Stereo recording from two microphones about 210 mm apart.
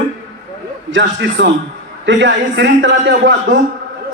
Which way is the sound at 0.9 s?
60° right (ahead or behind).